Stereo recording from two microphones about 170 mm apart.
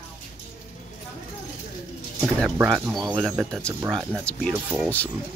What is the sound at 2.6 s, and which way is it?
Speech, 10° right (ahead or behind).